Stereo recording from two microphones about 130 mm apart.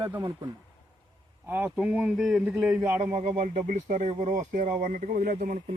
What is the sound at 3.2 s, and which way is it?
Speech, 60° right (ahead or behind).